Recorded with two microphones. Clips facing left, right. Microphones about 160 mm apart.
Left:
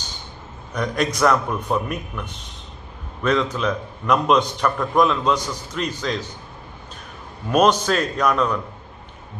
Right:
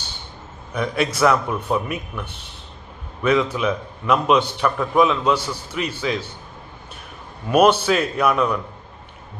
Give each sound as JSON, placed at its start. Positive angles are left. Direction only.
{"t": 0.7, "sound": "a man's voice", "side_deg": -5}
{"t": 7.4, "sound": "a man's voice", "side_deg": -5}